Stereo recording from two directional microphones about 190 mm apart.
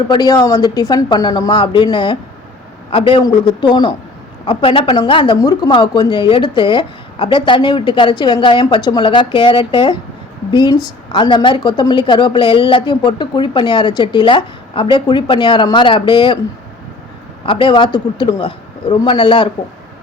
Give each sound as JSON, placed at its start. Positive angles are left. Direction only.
{"t": 0.1, "sound": "speech", "side_deg": 20}
{"t": 17.4, "sound": "speech", "side_deg": 25}